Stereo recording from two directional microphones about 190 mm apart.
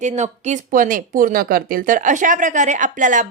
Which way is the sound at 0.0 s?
40° right (ahead or behind).